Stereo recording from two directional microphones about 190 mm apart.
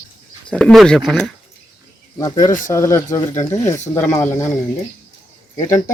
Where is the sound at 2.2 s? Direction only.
20° left (ahead or behind).